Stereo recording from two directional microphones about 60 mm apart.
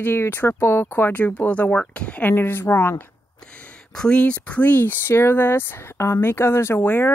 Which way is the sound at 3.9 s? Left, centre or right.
Centre.